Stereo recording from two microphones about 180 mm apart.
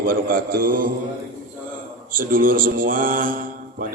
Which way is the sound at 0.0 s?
50° right (ahead or behind).